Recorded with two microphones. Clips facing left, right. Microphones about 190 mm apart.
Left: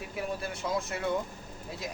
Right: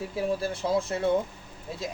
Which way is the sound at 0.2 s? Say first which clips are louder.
Right 6 dB; 30° right (ahead or behind).